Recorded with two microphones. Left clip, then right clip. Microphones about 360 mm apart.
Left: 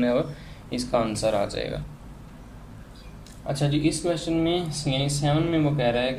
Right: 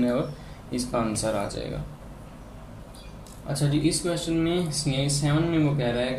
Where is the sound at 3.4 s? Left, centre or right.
Left.